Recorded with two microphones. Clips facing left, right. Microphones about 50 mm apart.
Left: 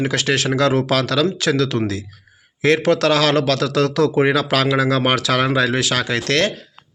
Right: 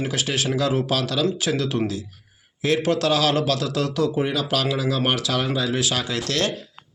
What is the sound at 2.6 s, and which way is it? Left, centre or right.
Speech, left.